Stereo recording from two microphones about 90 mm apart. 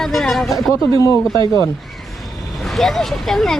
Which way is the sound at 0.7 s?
40° left (ahead or behind).